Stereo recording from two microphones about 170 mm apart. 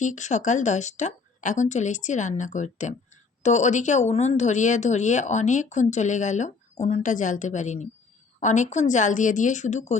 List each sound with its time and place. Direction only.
0.0 s a woman's voice: 45° left (ahead or behind)